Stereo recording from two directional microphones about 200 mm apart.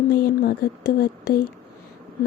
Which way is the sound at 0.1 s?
50° left (ahead or behind).